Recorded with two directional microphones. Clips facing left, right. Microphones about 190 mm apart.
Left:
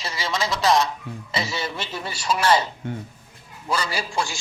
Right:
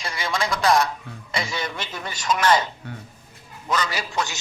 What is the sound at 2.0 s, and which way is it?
Speech, 10° left (ahead or behind).